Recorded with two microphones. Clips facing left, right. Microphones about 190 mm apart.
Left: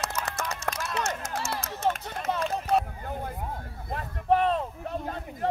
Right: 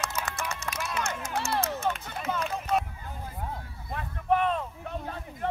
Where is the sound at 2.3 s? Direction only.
45° left (ahead or behind).